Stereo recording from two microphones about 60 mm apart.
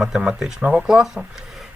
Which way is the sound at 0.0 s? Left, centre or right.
Centre.